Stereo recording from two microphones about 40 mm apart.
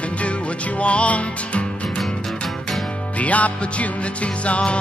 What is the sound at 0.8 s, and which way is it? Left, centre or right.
Music, left.